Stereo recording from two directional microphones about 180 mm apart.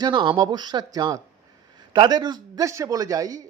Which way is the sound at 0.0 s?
25° right (ahead or behind).